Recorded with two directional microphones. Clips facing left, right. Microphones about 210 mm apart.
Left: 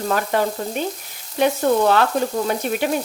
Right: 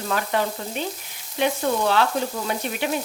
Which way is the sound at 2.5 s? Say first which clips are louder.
Left 5 dB; 45° left (ahead or behind).